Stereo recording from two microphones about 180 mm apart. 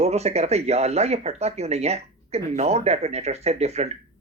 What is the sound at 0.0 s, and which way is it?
Speech, 35° right (ahead or behind).